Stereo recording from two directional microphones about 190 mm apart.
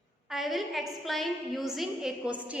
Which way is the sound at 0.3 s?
Centre (ahead or behind).